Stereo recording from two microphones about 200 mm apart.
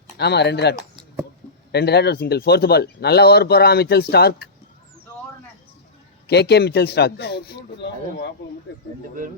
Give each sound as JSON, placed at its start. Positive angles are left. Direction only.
{"t": 0.2, "sound": "speech", "side_deg": 55}
{"t": 6.2, "sound": "speech", "side_deg": 55}